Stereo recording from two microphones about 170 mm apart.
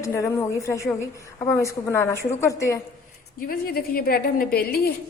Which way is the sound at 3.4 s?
60° left (ahead or behind).